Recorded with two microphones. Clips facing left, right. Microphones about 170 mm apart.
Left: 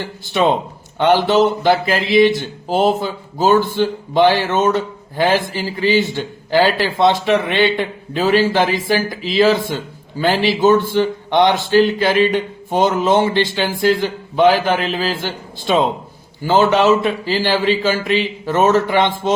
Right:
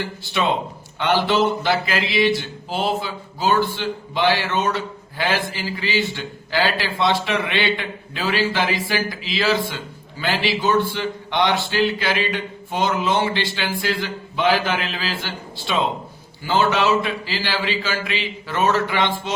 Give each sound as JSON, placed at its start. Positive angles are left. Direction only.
{"t": 0.0, "sound": "a man's voice", "side_deg": 45}